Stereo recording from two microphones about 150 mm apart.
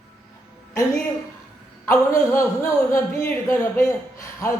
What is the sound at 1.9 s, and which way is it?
A man's voice, 20° left (ahead or behind).